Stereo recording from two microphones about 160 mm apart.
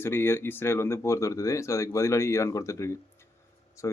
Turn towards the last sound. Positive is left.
turn(degrees=20)  # may be behind; listen again after turning